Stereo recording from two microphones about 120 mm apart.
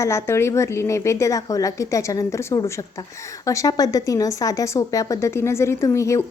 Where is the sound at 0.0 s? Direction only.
25° left (ahead or behind).